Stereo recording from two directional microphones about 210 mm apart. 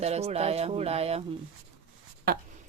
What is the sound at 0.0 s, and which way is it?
Speech, 30° right (ahead or behind).